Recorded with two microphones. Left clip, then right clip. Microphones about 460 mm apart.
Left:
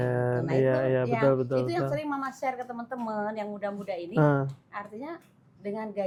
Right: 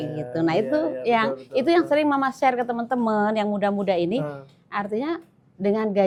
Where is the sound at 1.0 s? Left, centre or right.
Right.